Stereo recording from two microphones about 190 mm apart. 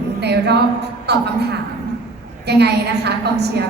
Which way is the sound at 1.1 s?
60° right (ahead or behind).